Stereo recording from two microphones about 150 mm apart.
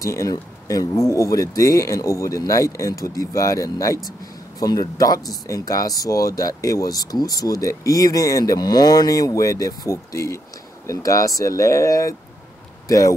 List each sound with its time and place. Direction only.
0.0 s speech: 20° left (ahead or behind)